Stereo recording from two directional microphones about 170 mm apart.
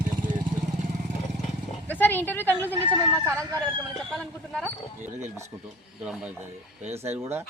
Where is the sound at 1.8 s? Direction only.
10° left (ahead or behind).